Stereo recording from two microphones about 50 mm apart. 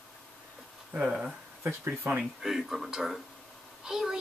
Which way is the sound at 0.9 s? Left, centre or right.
Right.